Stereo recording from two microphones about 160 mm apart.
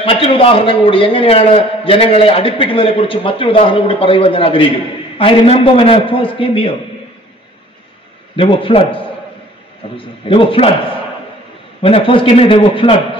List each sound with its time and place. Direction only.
0.0 s a man's voice: 35° left (ahead or behind)
8.4 s a man's voice: 35° left (ahead or behind)
11.8 s a man's voice: 35° left (ahead or behind)